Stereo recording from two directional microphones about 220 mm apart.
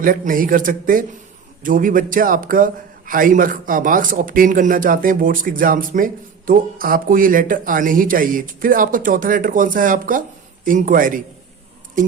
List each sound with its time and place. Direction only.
0.0 s a man's voice: 40° right (ahead or behind)